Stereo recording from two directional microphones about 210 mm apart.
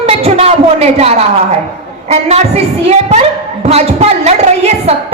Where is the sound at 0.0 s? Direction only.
30° right (ahead or behind).